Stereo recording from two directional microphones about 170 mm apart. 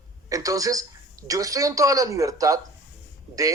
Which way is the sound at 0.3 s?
20° right (ahead or behind).